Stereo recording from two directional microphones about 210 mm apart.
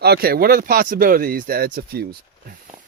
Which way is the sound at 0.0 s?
50° right (ahead or behind).